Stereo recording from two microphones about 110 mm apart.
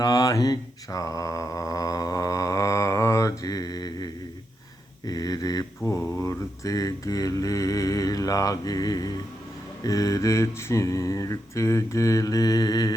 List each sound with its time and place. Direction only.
0.0 s mantra: 30° left (ahead or behind)
5.0 s speech: 35° left (ahead or behind)
5.8 s mantra: 25° left (ahead or behind)
9.8 s a sound: 30° left (ahead or behind)